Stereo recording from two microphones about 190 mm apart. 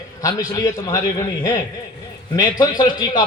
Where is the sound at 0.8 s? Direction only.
20° left (ahead or behind).